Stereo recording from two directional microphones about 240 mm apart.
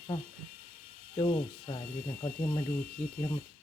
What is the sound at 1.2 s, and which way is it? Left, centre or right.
Speech, left.